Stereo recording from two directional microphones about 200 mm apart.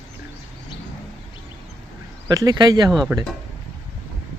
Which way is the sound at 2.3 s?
20° right (ahead or behind).